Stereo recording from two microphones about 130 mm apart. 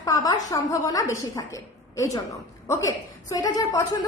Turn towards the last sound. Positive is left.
turn(degrees=25)  # may be behind; listen again after turning